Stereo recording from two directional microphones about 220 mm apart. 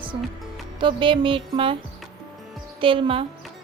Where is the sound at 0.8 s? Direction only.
20° right (ahead or behind).